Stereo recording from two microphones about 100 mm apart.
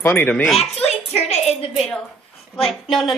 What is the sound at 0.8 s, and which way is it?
Speech, 90° left.